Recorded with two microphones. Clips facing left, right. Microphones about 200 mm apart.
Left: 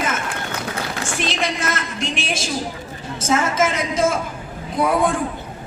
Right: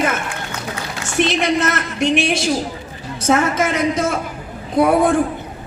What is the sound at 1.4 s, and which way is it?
A woman's voice, 60° right (ahead or behind).